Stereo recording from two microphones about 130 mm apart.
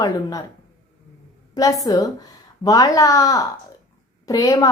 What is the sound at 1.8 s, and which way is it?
A woman's voice, 25° left (ahead or behind).